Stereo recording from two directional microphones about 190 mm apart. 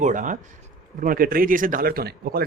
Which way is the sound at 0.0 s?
45° right (ahead or behind).